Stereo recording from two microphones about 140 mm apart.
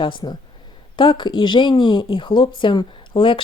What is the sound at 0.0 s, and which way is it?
Speech, 35° left (ahead or behind).